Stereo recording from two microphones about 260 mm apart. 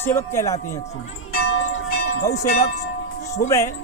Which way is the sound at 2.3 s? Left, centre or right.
Left.